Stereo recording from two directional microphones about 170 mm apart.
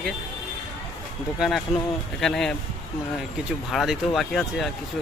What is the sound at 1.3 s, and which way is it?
Speech, centre (ahead or behind).